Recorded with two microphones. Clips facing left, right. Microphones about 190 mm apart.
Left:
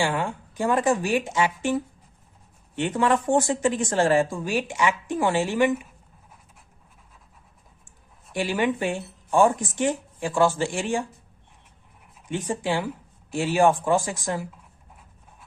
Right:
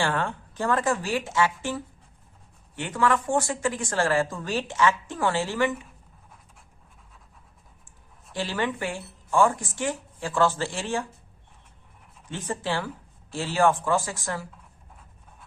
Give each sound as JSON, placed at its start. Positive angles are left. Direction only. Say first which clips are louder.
{"t": 0.0, "sound": "speech", "louder": "left 1 dB", "side_deg": 10}
{"t": 8.3, "sound": "speech", "louder": "left 4 dB", "side_deg": 15}
{"t": 12.3, "sound": "speech", "louder": "left 4 dB", "side_deg": 15}